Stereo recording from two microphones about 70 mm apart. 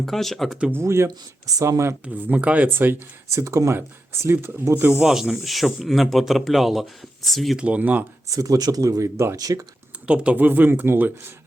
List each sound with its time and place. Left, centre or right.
0.0 s speech: centre
0.7 s speech: right
1.5 s speech: right
2.1 s speech: right
2.6 s speech: right
4.9 s speech: centre
7.5 s speech: centre
8.3 s speech: right
9.4 s speech: right
10.1 s speech: right